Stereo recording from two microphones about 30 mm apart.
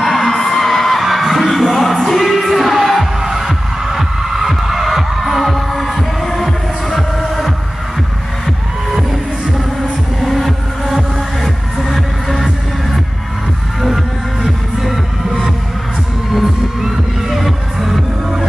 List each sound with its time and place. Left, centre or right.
0.0 s music: centre
3.2 s music: centre
5.2 s heart murmur: centre
10.2 s music: centre
13.8 s music: centre
16.3 s heart sounds: centre
17.4 s music: centre